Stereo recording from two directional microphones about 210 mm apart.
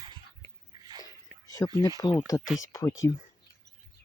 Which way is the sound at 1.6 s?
15° left (ahead or behind).